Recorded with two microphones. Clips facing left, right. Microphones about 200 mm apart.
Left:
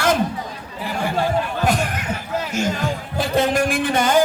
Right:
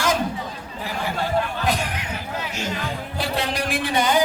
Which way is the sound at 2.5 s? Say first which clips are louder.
Left 7 dB; 45° left (ahead or behind).